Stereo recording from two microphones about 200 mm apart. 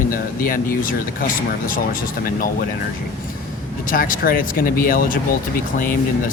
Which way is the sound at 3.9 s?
45° left (ahead or behind).